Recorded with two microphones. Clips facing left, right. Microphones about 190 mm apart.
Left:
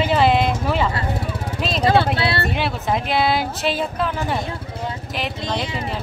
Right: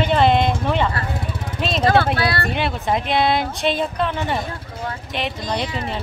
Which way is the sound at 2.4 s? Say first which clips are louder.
Even; centre (ahead or behind).